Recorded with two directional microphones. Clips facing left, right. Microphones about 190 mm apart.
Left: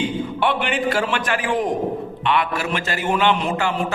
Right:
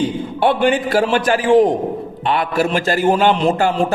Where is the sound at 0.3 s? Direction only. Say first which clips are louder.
Right 9 dB; 40° right (ahead or behind).